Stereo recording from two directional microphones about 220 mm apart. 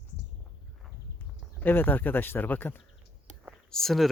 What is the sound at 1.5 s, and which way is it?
Speech, 10° left (ahead or behind).